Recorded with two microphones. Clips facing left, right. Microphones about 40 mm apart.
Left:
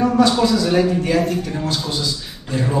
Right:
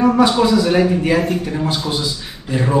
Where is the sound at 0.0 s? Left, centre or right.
Centre.